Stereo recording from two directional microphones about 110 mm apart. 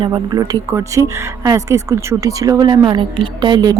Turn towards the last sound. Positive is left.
turn(degrees=-40)  # may be behind; listen again after turning